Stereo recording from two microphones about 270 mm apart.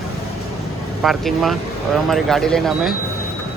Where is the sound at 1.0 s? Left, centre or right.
Centre.